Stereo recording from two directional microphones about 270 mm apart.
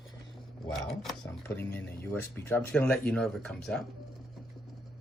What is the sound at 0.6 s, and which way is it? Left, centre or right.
Speech, centre.